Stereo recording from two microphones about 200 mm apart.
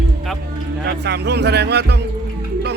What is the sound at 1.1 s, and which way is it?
Speech, 55° right (ahead or behind).